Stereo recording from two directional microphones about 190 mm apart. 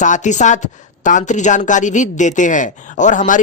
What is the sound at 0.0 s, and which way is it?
Speech, 40° left (ahead or behind).